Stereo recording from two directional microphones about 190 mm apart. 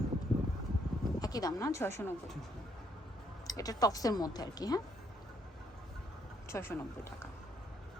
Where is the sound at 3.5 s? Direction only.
20° left (ahead or behind).